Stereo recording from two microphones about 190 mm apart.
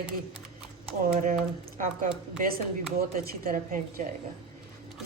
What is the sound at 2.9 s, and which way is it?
Speech, 50° right (ahead or behind).